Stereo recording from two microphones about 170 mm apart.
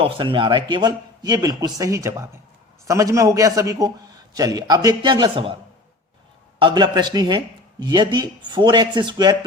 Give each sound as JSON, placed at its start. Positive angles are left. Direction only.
{"t": 0.0, "sound": "speech", "side_deg": -30}
{"t": 6.6, "sound": "speech", "side_deg": -25}